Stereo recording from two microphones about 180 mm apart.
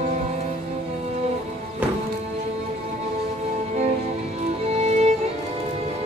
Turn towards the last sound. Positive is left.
turn(degrees=-35)  # may be behind; listen again after turning